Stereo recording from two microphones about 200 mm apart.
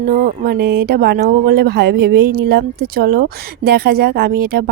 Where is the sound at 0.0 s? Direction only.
45° right (ahead or behind).